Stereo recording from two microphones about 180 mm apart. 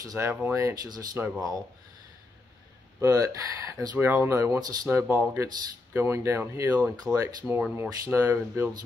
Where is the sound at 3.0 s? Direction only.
20° right (ahead or behind).